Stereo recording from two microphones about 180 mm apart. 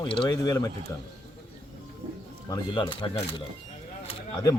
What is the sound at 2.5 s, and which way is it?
Speech, 25° left (ahead or behind).